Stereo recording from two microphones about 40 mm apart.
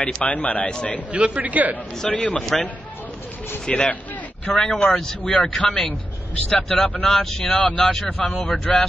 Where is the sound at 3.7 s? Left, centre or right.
Left.